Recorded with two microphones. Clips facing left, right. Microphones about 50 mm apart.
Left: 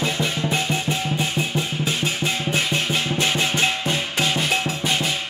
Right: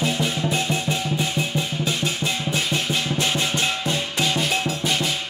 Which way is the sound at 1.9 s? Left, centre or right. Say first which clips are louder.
Left 1 dB; left.